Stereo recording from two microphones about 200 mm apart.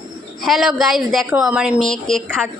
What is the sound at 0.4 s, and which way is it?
A woman's voice, centre (ahead or behind).